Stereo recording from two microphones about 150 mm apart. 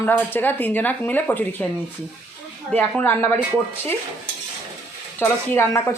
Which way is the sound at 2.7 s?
10° left (ahead or behind).